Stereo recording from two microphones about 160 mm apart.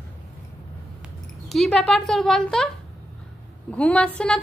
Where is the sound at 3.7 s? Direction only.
5° left (ahead or behind).